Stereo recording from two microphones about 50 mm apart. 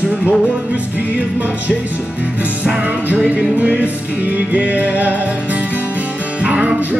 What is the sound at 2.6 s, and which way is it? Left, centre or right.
Music, right.